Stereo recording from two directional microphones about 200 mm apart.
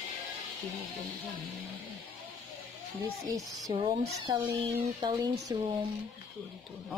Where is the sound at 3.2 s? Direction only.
15° right (ahead or behind).